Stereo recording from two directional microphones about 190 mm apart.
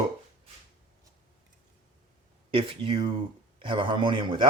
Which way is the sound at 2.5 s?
30° right (ahead or behind).